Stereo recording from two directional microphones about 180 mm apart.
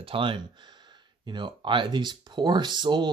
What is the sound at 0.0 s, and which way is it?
Speech, 30° right (ahead or behind).